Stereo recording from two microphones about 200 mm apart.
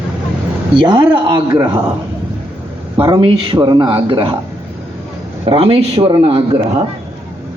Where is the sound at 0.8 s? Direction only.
25° right (ahead or behind).